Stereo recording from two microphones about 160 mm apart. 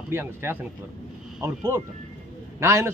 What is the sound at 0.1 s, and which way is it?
A man's voice, 15° right (ahead or behind).